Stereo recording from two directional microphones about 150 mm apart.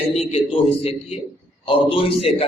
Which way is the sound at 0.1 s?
45° left (ahead or behind).